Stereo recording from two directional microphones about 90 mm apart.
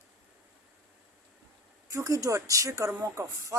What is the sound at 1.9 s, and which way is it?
A woman's voice, 35° right (ahead or behind).